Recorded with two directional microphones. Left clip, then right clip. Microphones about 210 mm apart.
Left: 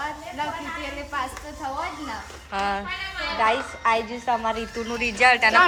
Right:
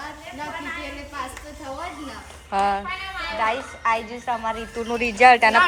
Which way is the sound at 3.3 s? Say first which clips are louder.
Left 2 dB; 20° left (ahead or behind).